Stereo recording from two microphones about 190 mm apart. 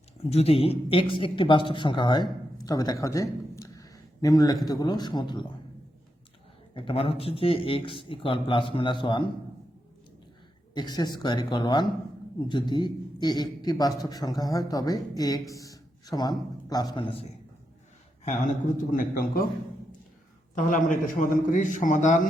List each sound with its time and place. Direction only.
0.3 s a man's voice: 30° left (ahead or behind)
6.7 s a man's voice: 30° left (ahead or behind)
10.8 s a man's voice: 20° left (ahead or behind)
18.9 s a man's voice: 50° left (ahead or behind)
20.6 s a man's voice: 45° left (ahead or behind)